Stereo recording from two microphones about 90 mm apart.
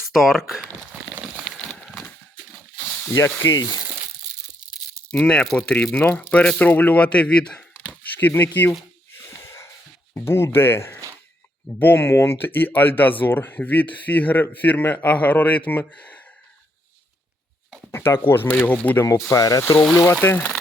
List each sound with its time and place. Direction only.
0.1 s speech: centre (ahead or behind)
1.2 s crumpling: 5° right (ahead or behind)
1.5 s a sound: 5° left (ahead or behind)
2.7 s snake: 30° left (ahead or behind)
3.1 s speech: 30° left (ahead or behind)
3.4 s frying: 40° left (ahead or behind)
5.1 s speech: 10° left (ahead or behind)
8.3 s speech: 25° left (ahead or behind)
9.3 s wheeze: 30° left (ahead or behind)
10.2 s speech: 30° left (ahead or behind)
17.9 s speech: 25° left (ahead or behind)
19.3 s speech: 40° left (ahead or behind)
19.8 s speech: 5° left (ahead or behind)
20.2 s speech: 20° left (ahead or behind)